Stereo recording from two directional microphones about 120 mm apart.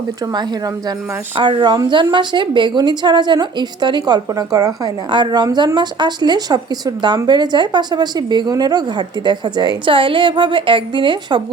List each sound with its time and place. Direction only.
0.3 s a woman's voice: 35° right (ahead or behind)